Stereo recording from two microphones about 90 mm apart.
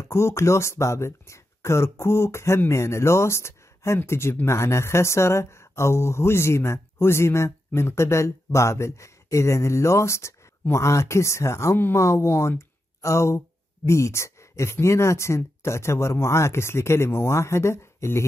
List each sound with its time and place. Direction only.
0.0 s speech: 30° left (ahead or behind)